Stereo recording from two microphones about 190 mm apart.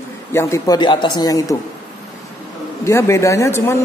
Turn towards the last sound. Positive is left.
turn(degrees=15)  # may be behind; listen again after turning